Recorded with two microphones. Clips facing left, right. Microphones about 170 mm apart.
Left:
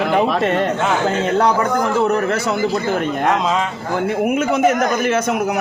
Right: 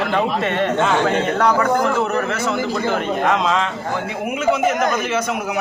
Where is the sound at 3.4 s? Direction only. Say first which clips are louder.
Even; 5° left (ahead or behind).